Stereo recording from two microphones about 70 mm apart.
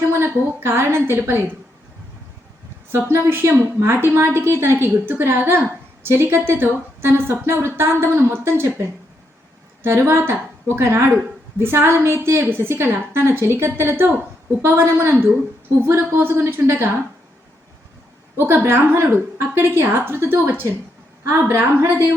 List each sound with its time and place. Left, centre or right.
0.1 s a woman's voice: right
2.9 s a woman's voice: right
9.8 s a woman's voice: right
18.3 s a woman's voice: right